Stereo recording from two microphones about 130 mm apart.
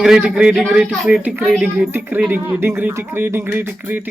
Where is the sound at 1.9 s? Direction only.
15° right (ahead or behind).